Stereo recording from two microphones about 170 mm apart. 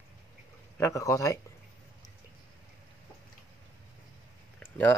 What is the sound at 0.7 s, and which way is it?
Speech, 15° left (ahead or behind).